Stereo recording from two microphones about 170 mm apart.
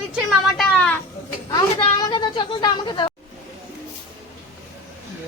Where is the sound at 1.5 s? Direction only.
25° left (ahead or behind).